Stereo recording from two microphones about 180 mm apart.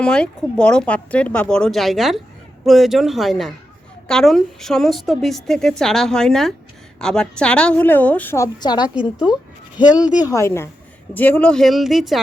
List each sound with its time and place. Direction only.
0.0 s a woman's voice: 5° left (ahead or behind)
8.6 s a woman's voice: 25° left (ahead or behind)
9.1 s a woman's voice: 5° right (ahead or behind)
10.2 s a woman's voice: 15° left (ahead or behind); by 12.2 s centre (ahead or behind)